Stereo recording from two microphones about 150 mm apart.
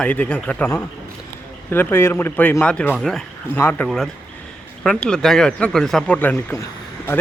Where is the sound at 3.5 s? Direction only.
10° left (ahead or behind).